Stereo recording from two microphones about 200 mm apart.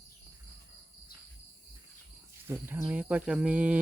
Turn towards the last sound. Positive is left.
turn(degrees=-5)  # may be behind; listen again after turning